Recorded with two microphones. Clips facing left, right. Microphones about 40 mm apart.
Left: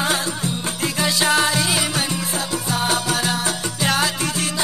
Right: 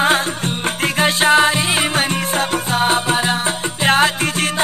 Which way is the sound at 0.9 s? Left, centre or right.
Right.